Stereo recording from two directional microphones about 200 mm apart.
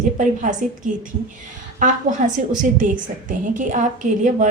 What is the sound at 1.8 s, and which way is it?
A woman's voice, 40° right (ahead or behind).